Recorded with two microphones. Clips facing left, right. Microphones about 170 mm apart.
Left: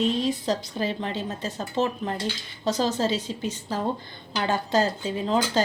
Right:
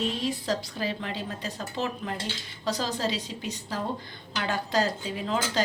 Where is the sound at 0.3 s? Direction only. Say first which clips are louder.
Left 3 dB; 20° left (ahead or behind).